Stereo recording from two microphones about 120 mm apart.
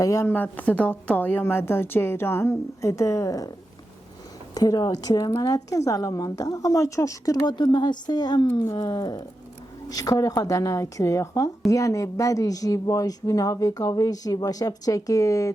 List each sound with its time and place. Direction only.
0.0 s speech: 25° left (ahead or behind)
4.5 s a woman's voice: 35° left (ahead or behind)